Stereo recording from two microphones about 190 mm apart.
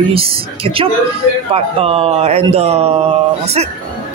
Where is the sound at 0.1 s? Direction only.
30° right (ahead or behind).